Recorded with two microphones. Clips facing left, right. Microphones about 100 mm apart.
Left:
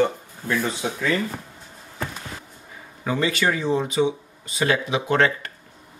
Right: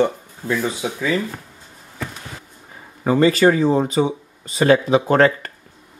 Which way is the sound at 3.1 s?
40° right (ahead or behind).